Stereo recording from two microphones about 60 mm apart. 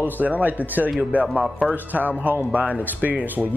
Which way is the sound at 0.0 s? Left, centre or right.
Right.